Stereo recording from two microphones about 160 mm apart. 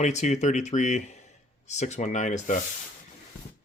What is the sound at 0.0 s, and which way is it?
Speech, 45° left (ahead or behind).